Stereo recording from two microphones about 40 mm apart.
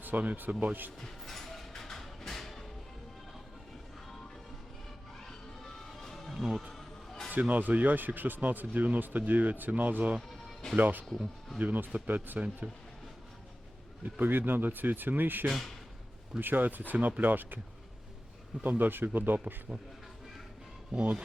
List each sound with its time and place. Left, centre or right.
0.0 s speech: right
0.9 s music: centre
5.6 s music: centre
6.3 s music: centre
6.6 s music: centre
7.3 s speech: right
14.0 s speech: right
18.8 s speech: right
20.9 s speech: right